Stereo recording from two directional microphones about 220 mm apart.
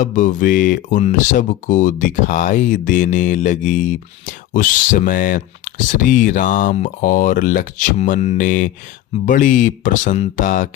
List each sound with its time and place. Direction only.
0.0 s speech: 35° left (ahead or behind)